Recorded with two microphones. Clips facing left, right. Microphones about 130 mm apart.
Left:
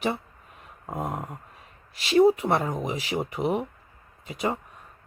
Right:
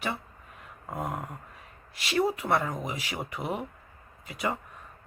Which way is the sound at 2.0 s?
25° left (ahead or behind).